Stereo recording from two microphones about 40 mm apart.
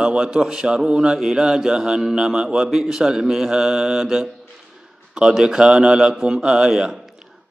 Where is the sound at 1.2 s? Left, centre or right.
Centre.